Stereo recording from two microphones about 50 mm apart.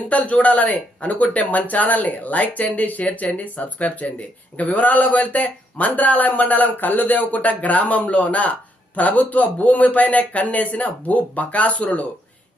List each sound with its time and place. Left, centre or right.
0.1 s speech: left